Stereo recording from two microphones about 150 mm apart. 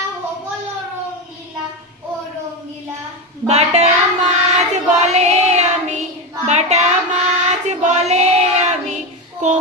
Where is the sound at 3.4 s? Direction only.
45° right (ahead or behind).